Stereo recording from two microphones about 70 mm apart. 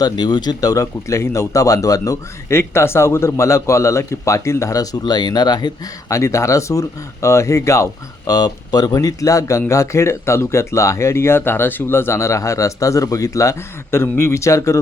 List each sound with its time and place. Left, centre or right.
0.0 s speech: left
2.5 s speech: left
6.1 s speech: left
8.3 s speech: left